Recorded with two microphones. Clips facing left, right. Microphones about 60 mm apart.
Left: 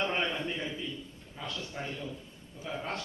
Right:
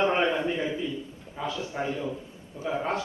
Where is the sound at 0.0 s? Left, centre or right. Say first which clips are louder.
Right 8 dB; centre.